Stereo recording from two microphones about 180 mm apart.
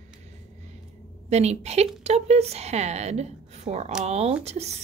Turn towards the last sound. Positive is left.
turn(degrees=-35)  # may be behind; listen again after turning